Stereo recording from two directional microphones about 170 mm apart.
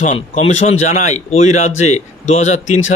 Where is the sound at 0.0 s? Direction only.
45° left (ahead or behind).